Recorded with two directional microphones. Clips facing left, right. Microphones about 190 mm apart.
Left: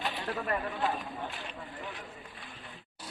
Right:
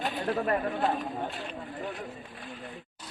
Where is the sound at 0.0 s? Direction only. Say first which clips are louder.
Right 6 dB; 40° right (ahead or behind).